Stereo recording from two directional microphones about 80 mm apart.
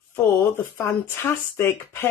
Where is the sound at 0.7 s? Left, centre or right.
Left.